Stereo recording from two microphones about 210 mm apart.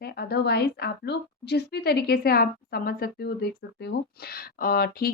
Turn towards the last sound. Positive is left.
turn(degrees=45)  # may be behind; listen again after turning